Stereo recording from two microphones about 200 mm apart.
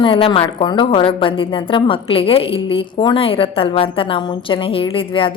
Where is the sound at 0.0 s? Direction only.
25° left (ahead or behind).